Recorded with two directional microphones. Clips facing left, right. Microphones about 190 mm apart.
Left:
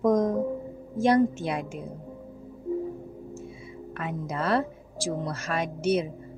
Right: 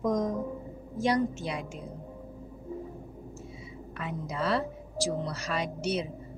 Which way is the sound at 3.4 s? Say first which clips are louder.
Left 4 dB; 55° left (ahead or behind).